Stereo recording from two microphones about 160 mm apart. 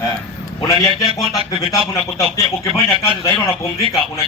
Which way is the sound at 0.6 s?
20° left (ahead or behind).